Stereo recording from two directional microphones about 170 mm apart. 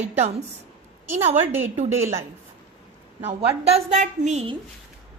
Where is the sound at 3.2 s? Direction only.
40° right (ahead or behind).